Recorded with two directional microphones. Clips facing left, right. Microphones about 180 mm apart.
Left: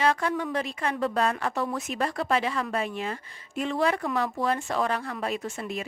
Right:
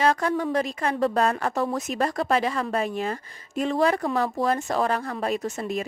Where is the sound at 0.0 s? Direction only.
40° right (ahead or behind).